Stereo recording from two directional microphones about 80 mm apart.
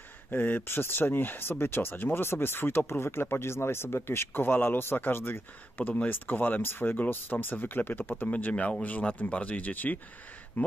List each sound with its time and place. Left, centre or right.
0.3 s speech: left